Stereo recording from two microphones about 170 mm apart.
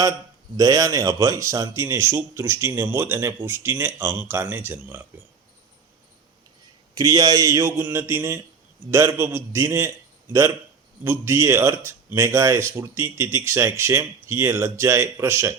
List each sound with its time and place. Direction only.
0.5 s speech: 20° right (ahead or behind)
6.9 s speech: 20° right (ahead or behind)
11.0 s speech: 15° right (ahead or behind)